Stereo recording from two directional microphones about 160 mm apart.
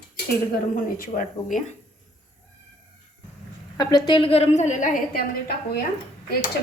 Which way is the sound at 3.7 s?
25° left (ahead or behind).